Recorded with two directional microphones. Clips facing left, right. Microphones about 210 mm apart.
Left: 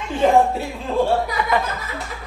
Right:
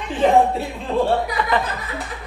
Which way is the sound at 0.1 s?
Centre (ahead or behind).